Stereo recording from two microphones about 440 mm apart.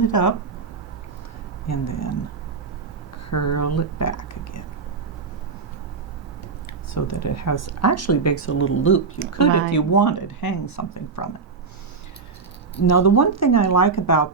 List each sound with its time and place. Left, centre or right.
0.1 s speech: left
1.6 s speech: left
3.2 s speech: left
6.9 s speech: left
12.8 s speech: left